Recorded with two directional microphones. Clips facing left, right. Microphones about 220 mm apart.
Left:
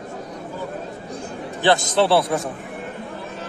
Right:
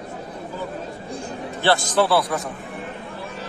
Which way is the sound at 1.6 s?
20° left (ahead or behind).